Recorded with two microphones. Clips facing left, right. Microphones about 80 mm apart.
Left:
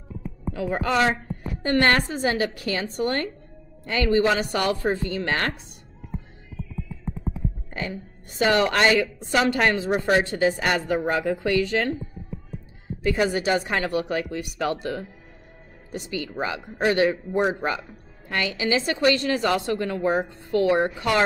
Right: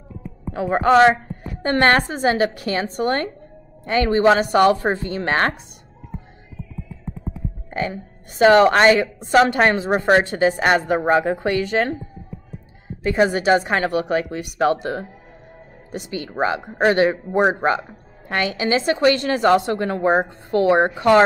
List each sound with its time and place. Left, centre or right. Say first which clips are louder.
0.7 s speech: right 10 dB; right
7.7 s a woman's voice: right 10 dB; right
13.0 s a woman's voice: right 5 dB; right
13.3 s a woman's voice: right 6 dB; right
17.6 s speech: right 7 dB; right